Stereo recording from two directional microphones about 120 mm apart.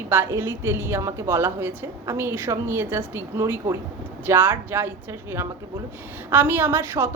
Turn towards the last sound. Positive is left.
turn(degrees=-20)  # may be behind; listen again after turning